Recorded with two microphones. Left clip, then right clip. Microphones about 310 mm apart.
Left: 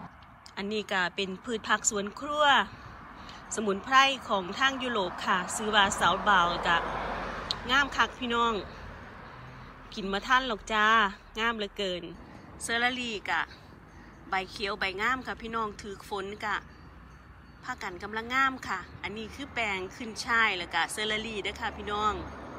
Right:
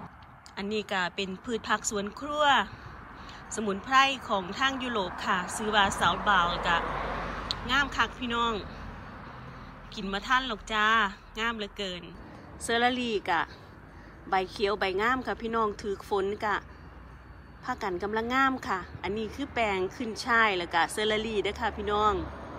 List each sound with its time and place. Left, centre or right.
0.6 s speech: centre
5.2 s speech: centre
6.8 s a sound: left
7.6 s speech: centre
10.0 s a woman's voice: centre
17.6 s a woman's voice: centre